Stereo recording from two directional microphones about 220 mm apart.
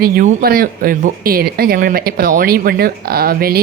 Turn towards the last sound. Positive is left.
turn(degrees=-40)  # may be behind; listen again after turning